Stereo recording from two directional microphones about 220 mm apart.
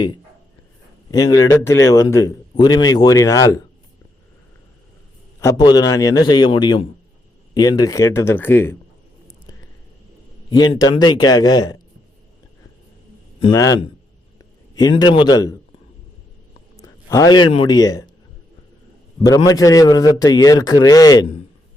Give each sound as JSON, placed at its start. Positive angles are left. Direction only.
{"t": 1.1, "sound": "a man's voice", "side_deg": 15}
{"t": 5.4, "sound": "a man's voice", "side_deg": 15}
{"t": 10.8, "sound": "a man's voice", "side_deg": 20}
{"t": 13.4, "sound": "a man's voice", "side_deg": 15}
{"t": 16.7, "sound": "a man's voice", "side_deg": 15}
{"t": 19.2, "sound": "a man's voice", "side_deg": 15}